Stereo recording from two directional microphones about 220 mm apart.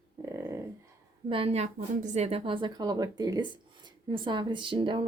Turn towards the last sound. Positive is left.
turn(degrees=-20)  # may be behind; listen again after turning